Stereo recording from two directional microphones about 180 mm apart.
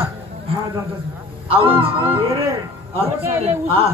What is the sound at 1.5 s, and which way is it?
A man's voice, 30° right (ahead or behind).